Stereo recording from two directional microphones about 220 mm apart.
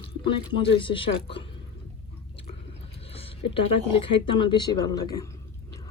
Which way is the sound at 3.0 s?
25° left (ahead or behind).